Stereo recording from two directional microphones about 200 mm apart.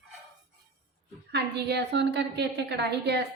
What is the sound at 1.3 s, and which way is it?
A woman's voice, 55° right (ahead or behind).